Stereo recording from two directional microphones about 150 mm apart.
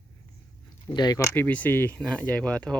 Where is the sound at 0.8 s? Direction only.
25° left (ahead or behind).